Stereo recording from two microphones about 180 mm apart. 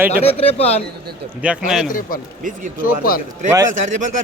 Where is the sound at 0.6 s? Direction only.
35° left (ahead or behind).